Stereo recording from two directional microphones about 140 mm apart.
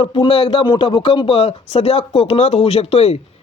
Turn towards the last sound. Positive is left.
turn(degrees=45)  # may be behind; listen again after turning